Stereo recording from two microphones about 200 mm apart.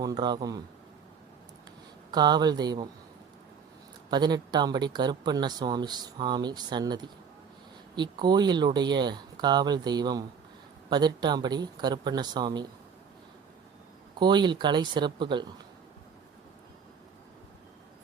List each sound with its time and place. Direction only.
0.0 s speech: 20° right (ahead or behind)
2.0 s speech: 20° right (ahead or behind)
4.1 s speech: 20° right (ahead or behind)
14.2 s speech: 20° right (ahead or behind)